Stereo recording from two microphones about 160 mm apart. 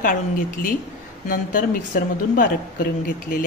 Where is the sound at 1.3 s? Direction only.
55° left (ahead or behind).